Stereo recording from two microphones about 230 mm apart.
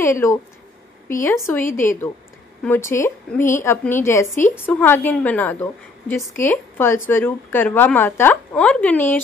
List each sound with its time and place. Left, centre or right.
0.0 s a woman's voice: centre
4.3 s a woman's voice: left
4.6 s a woman's voice: centre